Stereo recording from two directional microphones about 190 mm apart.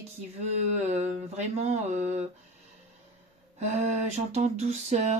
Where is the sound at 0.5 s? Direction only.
35° right (ahead or behind).